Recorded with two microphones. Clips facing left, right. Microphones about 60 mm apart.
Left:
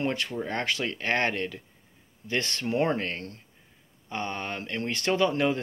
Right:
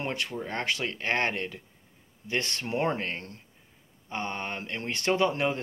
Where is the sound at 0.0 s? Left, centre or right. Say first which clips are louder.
Left 3 dB; centre.